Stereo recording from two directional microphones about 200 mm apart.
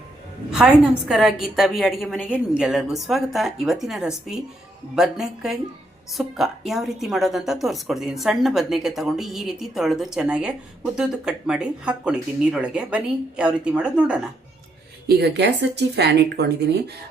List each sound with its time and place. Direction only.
0.5 s a woman's voice: 5° right (ahead or behind)
15.0 s speech: 55° right (ahead or behind)